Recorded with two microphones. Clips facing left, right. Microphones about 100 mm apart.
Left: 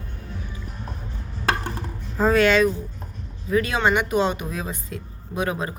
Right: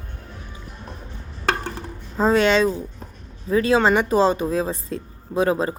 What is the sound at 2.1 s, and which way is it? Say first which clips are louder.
Speech: right 1 dB; 25° right (ahead or behind).